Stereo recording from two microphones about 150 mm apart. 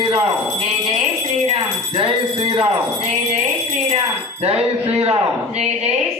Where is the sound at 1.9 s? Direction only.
35° right (ahead or behind).